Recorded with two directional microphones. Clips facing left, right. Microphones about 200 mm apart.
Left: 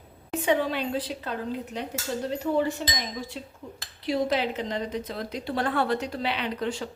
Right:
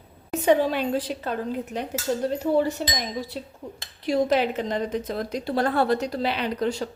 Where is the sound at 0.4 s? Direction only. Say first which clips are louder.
Right 5 dB; 45° right (ahead or behind).